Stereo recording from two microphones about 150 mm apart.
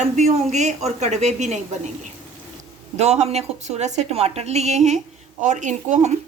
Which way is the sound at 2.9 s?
45° right (ahead or behind).